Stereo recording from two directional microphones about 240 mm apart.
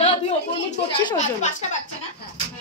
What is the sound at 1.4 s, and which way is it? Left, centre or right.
Speech, left.